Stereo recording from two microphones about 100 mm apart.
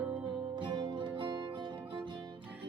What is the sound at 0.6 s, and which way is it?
Music, 50° right (ahead or behind).